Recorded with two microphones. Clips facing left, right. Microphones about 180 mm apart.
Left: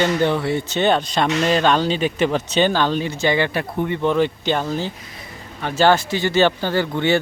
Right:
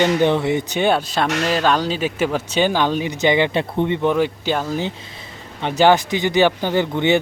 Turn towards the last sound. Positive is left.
turn(degrees=-20)  # may be behind; listen again after turning